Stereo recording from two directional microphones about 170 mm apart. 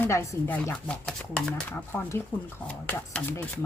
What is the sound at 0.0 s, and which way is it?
Speech, 15° left (ahead or behind).